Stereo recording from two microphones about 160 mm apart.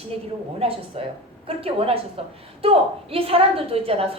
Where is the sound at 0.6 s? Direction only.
35° right (ahead or behind).